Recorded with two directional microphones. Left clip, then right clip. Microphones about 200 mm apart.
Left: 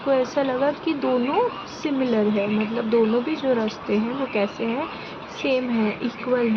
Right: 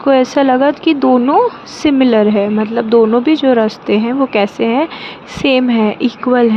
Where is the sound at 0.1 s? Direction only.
50° right (ahead or behind).